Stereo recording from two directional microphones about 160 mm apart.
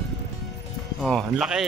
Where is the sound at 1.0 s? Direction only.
Centre (ahead or behind).